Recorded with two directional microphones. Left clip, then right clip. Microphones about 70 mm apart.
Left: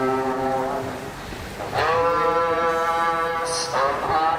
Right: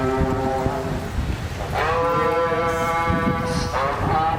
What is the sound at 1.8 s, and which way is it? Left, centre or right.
Sheep, centre.